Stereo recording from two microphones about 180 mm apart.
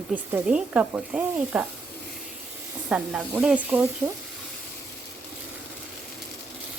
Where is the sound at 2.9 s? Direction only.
5° right (ahead or behind).